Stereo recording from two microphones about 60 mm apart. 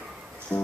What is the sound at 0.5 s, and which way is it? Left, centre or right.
Music, left.